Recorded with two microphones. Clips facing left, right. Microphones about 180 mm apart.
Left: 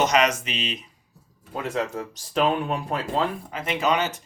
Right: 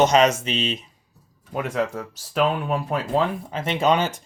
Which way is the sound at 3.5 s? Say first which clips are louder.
Right 6 dB; 25° right (ahead or behind).